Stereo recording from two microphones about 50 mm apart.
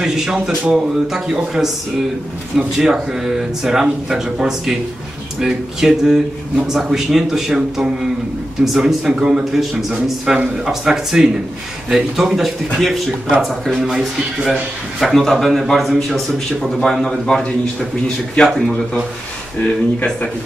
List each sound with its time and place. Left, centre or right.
0.0 s a man's voice: centre
9.4 s a man's voice: centre
17.4 s a man's voice: centre